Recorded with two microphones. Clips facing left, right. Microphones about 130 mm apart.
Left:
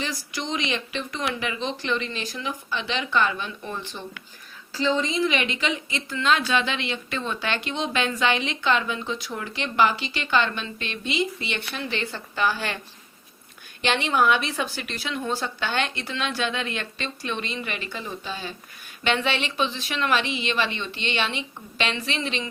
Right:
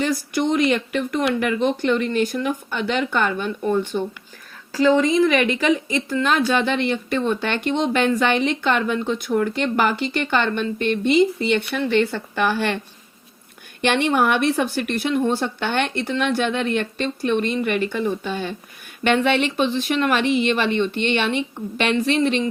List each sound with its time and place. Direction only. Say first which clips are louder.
0.0 s a woman's voice: right 10 dB; 55° right (ahead or behind)
13.8 s a woman's voice: right 3 dB; 60° right (ahead or behind)